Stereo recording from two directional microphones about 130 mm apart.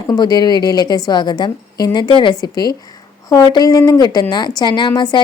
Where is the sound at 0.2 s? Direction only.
30° left (ahead or behind).